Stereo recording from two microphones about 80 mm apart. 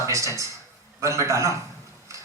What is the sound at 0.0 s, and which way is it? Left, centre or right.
A man's voice, right.